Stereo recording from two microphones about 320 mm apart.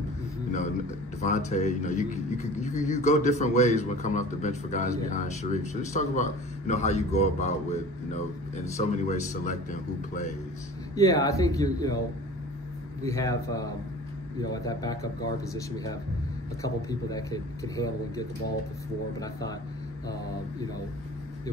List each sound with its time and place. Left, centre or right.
1.2 s a man's voice: left
11.0 s a man's voice: centre
13.0 s a man's voice: centre